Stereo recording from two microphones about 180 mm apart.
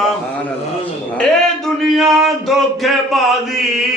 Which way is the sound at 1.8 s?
Centre (ahead or behind).